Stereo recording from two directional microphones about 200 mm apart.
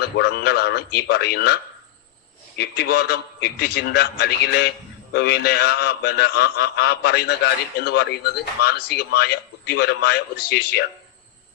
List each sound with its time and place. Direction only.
0.0 s a man's voice: 55° left (ahead or behind)
2.6 s a man's voice: 55° left (ahead or behind)